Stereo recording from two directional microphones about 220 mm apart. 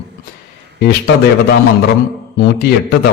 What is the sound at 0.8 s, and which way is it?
A man's voice, 45° left (ahead or behind).